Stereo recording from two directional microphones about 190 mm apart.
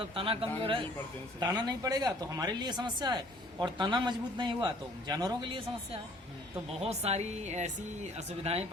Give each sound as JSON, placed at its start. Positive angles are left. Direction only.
{"t": 0.0, "sound": "speech", "side_deg": -30}